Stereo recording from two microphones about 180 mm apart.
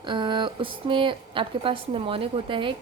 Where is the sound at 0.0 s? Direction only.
25° right (ahead or behind).